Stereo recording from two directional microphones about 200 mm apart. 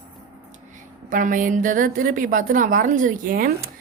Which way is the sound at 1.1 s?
40° right (ahead or behind).